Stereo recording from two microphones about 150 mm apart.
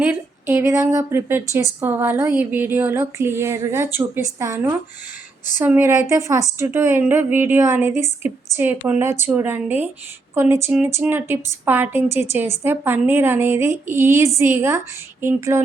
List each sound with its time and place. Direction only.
0.0 s a woman's voice: 15° right (ahead or behind)